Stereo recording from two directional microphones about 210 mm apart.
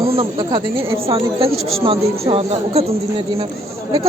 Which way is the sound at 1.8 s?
25° right (ahead or behind).